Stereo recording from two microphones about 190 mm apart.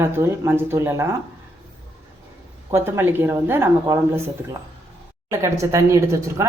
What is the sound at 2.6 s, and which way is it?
Speech, 15° right (ahead or behind).